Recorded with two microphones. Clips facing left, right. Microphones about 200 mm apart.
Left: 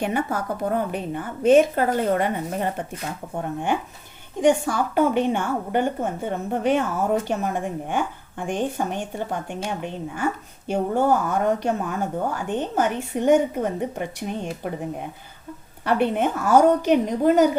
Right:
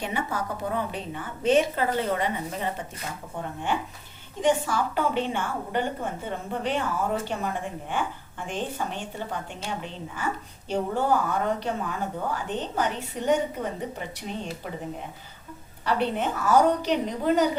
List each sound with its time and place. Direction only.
0.0 s a woman's voice: 50° left (ahead or behind)
4.4 s a woman's voice: 50° left (ahead or behind)
15.8 s a woman's voice: 55° left (ahead or behind)